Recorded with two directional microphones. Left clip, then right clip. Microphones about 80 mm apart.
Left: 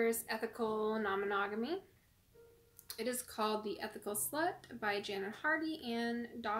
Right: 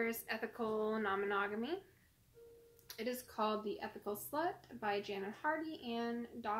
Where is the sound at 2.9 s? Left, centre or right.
Left.